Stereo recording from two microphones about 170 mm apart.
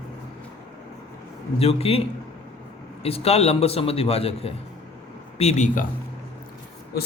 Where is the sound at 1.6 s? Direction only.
35° left (ahead or behind).